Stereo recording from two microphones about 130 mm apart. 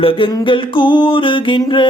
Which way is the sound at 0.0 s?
40° left (ahead or behind).